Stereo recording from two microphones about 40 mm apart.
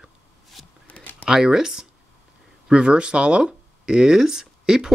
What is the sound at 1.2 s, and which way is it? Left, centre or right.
Speech, centre.